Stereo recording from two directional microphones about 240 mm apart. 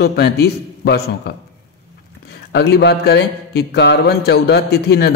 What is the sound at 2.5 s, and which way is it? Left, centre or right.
A man's voice, left.